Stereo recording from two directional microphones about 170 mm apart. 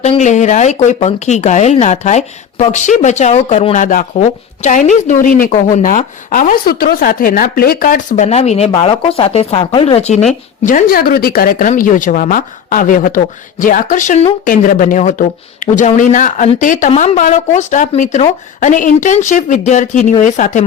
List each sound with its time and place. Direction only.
0.0 s a woman's voice: 40° left (ahead or behind)
3.8 s a woman's voice: 50° left (ahead or behind)
10.6 s a woman's voice: 50° left (ahead or behind)